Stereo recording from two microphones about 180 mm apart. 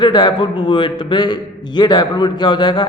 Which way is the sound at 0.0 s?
25° left (ahead or behind).